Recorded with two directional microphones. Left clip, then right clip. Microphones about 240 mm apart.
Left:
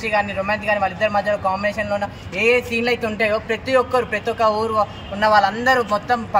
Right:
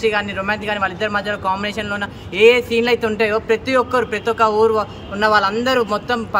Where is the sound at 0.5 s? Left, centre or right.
Right.